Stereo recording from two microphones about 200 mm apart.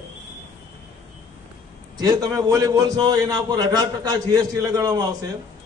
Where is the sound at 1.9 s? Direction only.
20° right (ahead or behind).